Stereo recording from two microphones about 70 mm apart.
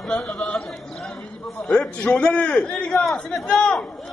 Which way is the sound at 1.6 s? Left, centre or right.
Left.